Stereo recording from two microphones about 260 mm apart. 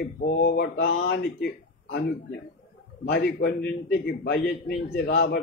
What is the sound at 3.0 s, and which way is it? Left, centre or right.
A man's voice, left.